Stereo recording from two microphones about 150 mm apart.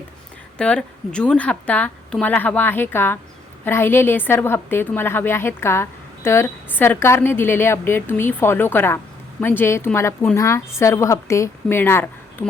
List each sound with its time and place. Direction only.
0.6 s a woman's voice: 5° left (ahead or behind)